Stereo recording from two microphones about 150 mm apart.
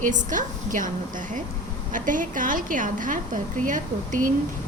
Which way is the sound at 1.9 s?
60° right (ahead or behind).